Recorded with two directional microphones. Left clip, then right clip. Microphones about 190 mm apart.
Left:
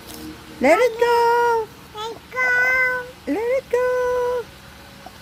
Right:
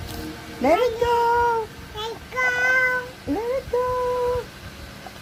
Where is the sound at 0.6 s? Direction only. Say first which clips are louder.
Left 4 dB; 40° left (ahead or behind).